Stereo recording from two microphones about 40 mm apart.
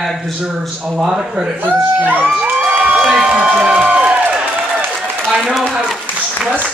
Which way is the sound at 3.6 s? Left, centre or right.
Right.